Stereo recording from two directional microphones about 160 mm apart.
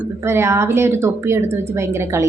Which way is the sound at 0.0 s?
15° right (ahead or behind).